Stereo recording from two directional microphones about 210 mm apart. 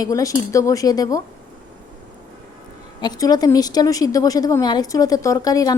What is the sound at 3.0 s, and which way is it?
A woman's voice, 20° left (ahead or behind).